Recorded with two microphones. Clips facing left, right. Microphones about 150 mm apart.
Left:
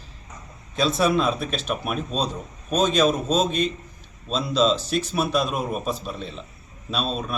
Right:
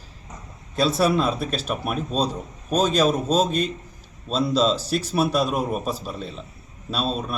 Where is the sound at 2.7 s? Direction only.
35° right (ahead or behind).